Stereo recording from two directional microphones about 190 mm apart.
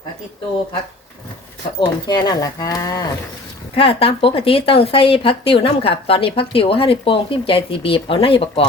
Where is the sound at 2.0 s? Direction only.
20° left (ahead or behind).